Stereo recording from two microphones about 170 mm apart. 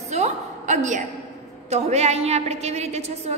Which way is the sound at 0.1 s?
40° right (ahead or behind).